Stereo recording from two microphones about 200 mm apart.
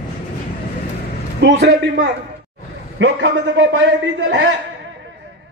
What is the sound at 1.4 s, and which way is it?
A man's voice, 65° right (ahead or behind).